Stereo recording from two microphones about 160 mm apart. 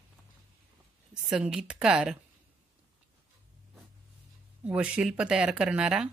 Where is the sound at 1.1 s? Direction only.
5° right (ahead or behind).